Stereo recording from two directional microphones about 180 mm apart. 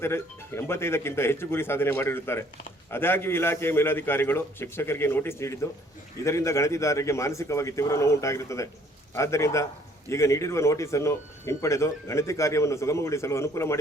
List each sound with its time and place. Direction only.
0.0 s speech: 15° left (ahead or behind)